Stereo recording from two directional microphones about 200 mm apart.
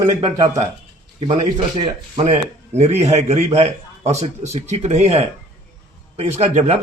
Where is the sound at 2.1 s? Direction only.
35° right (ahead or behind).